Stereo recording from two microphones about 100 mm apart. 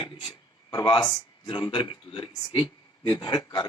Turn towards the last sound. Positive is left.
turn(degrees=45)  # may be behind; listen again after turning